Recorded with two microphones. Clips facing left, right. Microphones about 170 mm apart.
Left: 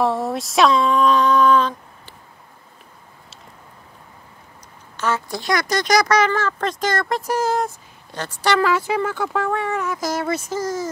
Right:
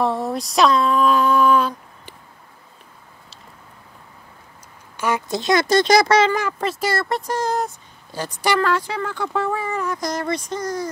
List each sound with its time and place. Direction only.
0.0 s speech: centre (ahead or behind)
4.9 s speech: 15° right (ahead or behind)
6.3 s speech: 10° right (ahead or behind)
7.2 s speech: 5° left (ahead or behind)
8.3 s speech: 15° right (ahead or behind)
8.5 s speech: 5° left (ahead or behind)